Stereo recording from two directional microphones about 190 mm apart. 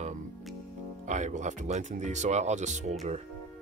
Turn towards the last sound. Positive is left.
turn(degrees=-35)  # may be behind; listen again after turning